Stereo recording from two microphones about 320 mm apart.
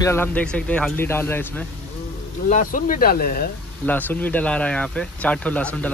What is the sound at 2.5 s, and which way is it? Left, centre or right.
Speech, left.